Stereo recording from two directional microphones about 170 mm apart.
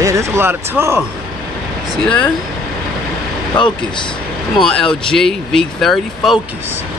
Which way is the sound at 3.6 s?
25° left (ahead or behind).